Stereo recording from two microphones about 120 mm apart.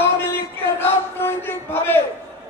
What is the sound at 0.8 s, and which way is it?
Speech, 20° left (ahead or behind).